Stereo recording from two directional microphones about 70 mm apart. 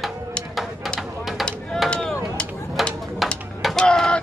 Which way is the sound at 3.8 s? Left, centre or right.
Centre.